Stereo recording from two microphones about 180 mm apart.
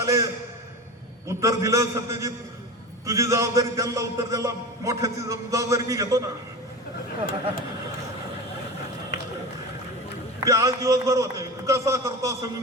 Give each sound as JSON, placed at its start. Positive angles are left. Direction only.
{"t": 0.0, "sound": "a sound", "side_deg": -20}
{"t": 1.4, "sound": "a man's voice", "side_deg": -15}
{"t": 10.4, "sound": "a man's voice", "side_deg": -20}